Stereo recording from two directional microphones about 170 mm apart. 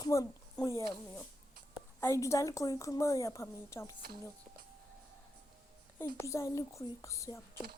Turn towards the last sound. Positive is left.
turn(degrees=20)  # may be behind; listen again after turning